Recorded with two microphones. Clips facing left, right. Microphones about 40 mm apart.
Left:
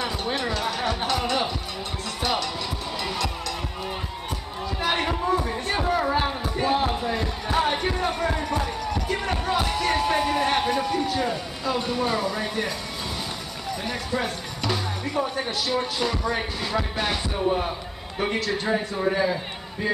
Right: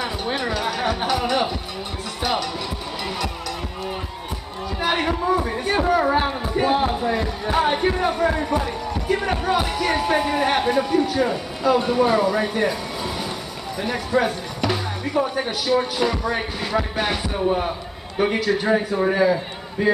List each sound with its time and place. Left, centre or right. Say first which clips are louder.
0.0 s music: right 2 dB; centre
2.2 s speech: right 3 dB; centre
3.0 s music: right 1 dB; centre
4.6 s a sound: right 3 dB; centre
6.9 s a man's voice: right 4 dB; centre
11.6 s speech: right 8 dB; centre
13.8 s speech: right 8 dB; right